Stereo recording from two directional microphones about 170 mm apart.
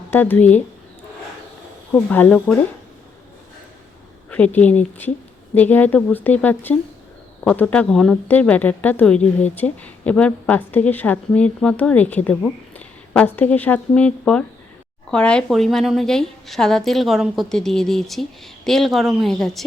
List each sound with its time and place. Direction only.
0.1 s a woman's voice: 10° left (ahead or behind)
1.9 s a woman's voice: 10° left (ahead or behind)
4.3 s a woman's voice: 10° left (ahead or behind)